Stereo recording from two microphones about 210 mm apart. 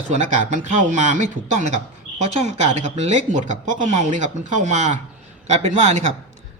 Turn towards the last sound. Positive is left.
turn(degrees=-35)  # may be behind; listen again after turning